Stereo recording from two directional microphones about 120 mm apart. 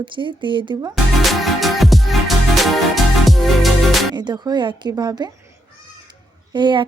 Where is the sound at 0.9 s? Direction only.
Centre (ahead or behind).